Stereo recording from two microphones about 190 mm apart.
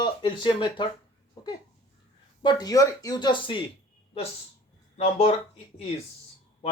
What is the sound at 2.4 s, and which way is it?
Speech, 20° left (ahead or behind).